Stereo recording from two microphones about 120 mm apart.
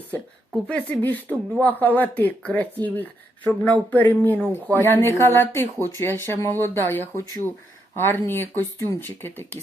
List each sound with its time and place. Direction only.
0.7 s speech: 15° left (ahead or behind)